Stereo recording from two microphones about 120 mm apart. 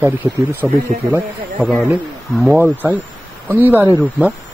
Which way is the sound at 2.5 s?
15° right (ahead or behind).